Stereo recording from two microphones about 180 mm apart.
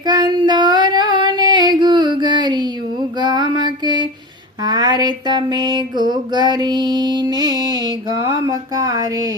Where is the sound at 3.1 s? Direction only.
25° right (ahead or behind).